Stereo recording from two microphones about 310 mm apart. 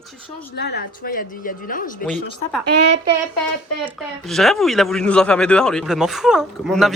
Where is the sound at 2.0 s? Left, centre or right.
Centre.